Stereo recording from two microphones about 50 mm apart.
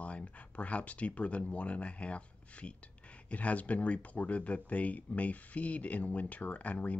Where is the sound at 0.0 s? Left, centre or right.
Left.